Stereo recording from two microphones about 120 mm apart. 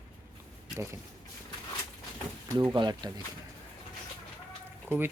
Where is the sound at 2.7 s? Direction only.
35° right (ahead or behind).